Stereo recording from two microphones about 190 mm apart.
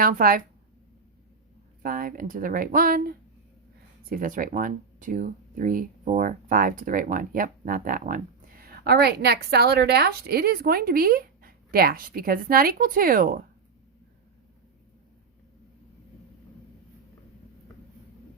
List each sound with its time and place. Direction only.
0.0 s speech: 50° right (ahead or behind)
1.8 s speech: 50° right (ahead or behind)